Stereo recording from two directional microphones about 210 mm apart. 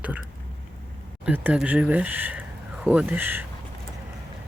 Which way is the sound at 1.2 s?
5° right (ahead or behind).